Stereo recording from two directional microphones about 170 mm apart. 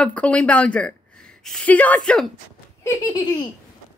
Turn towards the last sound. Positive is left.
turn(degrees=20)  # may be behind; listen again after turning